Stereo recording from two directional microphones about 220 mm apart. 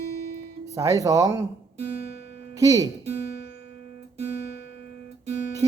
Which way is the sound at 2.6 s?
15° right (ahead or behind).